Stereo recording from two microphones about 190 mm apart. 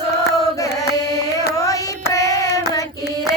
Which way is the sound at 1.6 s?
15° left (ahead or behind).